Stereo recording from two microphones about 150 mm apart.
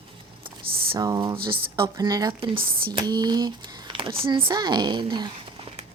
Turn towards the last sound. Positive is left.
turn(degrees=-30)  # may be behind; listen again after turning